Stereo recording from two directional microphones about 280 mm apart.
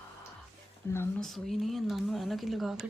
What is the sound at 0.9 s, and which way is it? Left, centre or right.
Speech, centre.